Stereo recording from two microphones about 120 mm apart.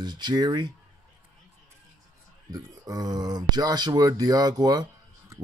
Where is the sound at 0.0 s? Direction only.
35° right (ahead or behind).